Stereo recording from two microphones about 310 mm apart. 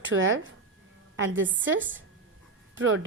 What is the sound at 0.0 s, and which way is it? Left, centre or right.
A woman's voice, right.